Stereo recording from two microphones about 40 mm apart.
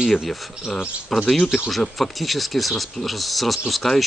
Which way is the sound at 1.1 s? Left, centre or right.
Centre.